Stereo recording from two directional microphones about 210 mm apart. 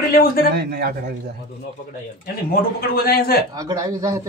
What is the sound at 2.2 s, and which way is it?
Speech, 45° left (ahead or behind).